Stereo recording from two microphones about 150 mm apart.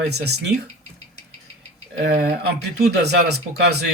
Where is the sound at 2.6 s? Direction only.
90° right.